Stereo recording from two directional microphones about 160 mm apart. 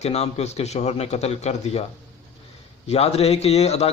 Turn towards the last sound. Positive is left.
turn(degrees=40)  # may be behind; listen again after turning